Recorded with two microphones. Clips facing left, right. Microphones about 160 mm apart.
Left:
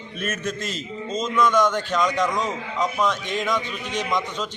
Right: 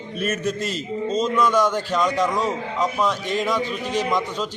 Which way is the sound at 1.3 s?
10° right (ahead or behind).